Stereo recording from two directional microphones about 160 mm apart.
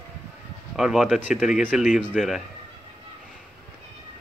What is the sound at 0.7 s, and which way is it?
A man's voice, centre (ahead or behind).